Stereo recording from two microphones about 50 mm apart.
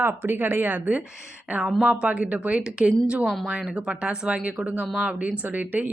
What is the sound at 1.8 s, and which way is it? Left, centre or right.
Speech, right.